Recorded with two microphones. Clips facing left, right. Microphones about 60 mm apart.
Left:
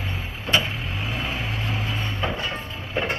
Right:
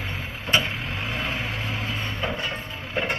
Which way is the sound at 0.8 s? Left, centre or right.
Right.